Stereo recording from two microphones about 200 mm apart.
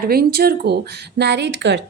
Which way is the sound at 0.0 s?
50° right (ahead or behind).